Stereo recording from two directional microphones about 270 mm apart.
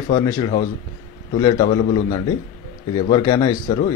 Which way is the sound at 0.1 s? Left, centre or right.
Centre.